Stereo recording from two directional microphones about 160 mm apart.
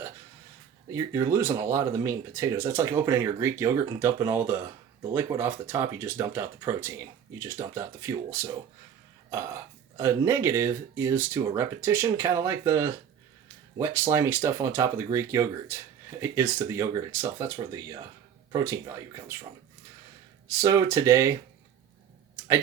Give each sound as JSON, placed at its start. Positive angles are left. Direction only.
{"t": 0.9, "sound": "speech", "side_deg": -15}
{"t": 10.0, "sound": "speech", "side_deg": -20}
{"t": 20.5, "sound": "speech", "side_deg": -20}